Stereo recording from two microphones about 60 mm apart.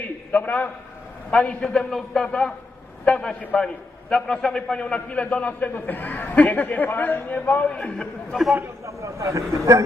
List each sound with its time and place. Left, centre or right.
0.0 s a sound: left
1.3 s a man's voice: centre
8.9 s speech: right